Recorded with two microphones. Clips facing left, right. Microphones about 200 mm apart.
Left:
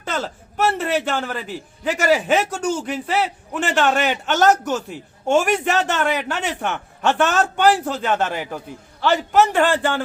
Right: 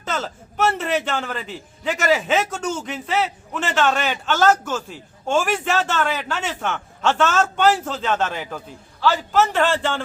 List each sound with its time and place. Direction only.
0.0 s a man's voice: 10° left (ahead or behind)